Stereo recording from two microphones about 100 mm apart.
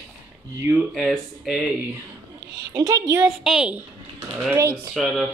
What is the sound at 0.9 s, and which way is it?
Speech, centre (ahead or behind).